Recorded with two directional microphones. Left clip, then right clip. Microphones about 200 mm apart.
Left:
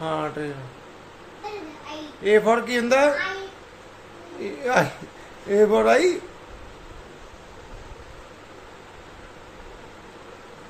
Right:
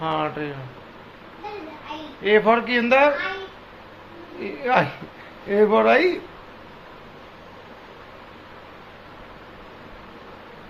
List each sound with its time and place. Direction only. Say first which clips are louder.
0.0 s a man's voice: right 2 dB; 15° left (ahead or behind)
2.2 s a man's voice: right 1 dB; 15° left (ahead or behind)
4.4 s a man's voice: right 1 dB; 15° left (ahead or behind)